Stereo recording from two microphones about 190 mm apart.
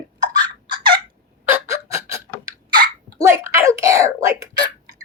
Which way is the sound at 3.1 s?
15° right (ahead or behind).